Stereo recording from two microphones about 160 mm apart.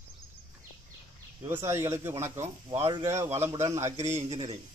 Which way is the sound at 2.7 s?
40° right (ahead or behind).